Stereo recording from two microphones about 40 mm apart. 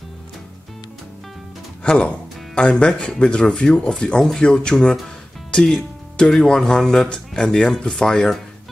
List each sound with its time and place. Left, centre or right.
1.8 s speech: left
6.1 s speech: left